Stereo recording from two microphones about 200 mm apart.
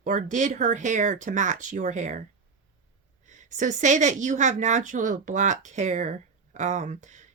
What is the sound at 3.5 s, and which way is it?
Speech, 40° right (ahead or behind).